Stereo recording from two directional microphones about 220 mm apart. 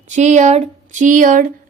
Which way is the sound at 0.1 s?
35° right (ahead or behind).